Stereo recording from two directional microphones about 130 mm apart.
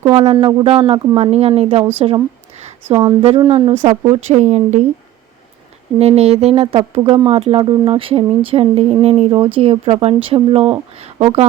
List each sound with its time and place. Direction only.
0.3 s speech: 45° right (ahead or behind)
2.9 s speech: 35° right (ahead or behind)
3.2 s speech: 45° right (ahead or behind)
6.0 s speech: 55° right (ahead or behind)